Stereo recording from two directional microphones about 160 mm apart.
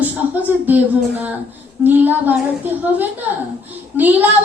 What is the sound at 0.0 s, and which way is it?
A woman's voice, 10° right (ahead or behind).